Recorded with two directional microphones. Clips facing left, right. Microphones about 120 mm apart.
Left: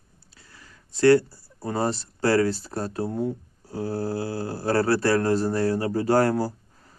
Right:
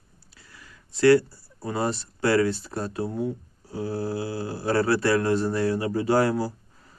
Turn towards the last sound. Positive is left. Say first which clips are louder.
# left 1 dB
turn(degrees=45)  # may be behind; listen again after turning